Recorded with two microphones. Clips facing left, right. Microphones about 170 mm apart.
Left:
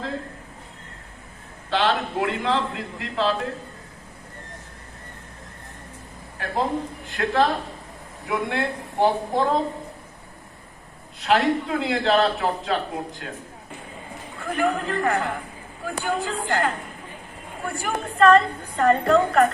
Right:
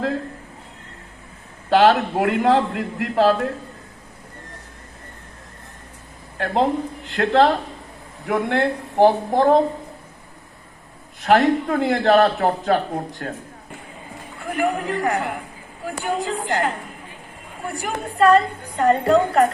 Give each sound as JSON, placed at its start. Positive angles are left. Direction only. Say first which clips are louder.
{"t": 1.7, "sound": "a man's voice", "louder": "right 7 dB", "side_deg": -45}
{"t": 6.4, "sound": "speech", "louder": "right 5 dB", "side_deg": -70}
{"t": 11.2, "sound": "a man's voice", "louder": "right 4 dB", "side_deg": -50}
{"t": 14.3, "sound": "a woman's voice", "louder": "right 1 dB", "side_deg": -15}